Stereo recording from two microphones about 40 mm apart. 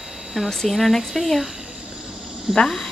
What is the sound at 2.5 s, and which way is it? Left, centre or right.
Speech, centre.